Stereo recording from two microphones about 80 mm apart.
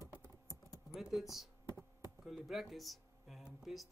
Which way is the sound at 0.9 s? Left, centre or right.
Centre.